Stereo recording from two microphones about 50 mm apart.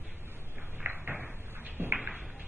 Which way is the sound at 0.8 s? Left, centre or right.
Right.